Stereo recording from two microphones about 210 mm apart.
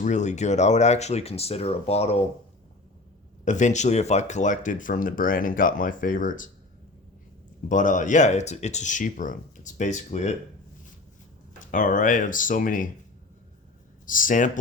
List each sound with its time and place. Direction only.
0.0 s speech: 35° left (ahead or behind)
3.4 s speech: 35° left (ahead or behind)
7.7 s speech: 35° left (ahead or behind)
11.7 s speech: 40° left (ahead or behind)
14.1 s speech: 40° left (ahead or behind)